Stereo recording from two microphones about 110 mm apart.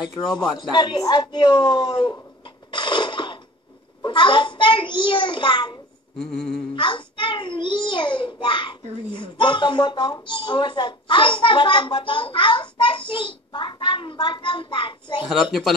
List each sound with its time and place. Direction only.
0.6 s a child's voice: 40° left (ahead or behind)
2.7 s a sound: 45° left (ahead or behind)
4.0 s a child's voice: 45° left (ahead or behind)
6.1 s humming: 5° left (ahead or behind)
6.7 s a child's voice: 45° left (ahead or behind)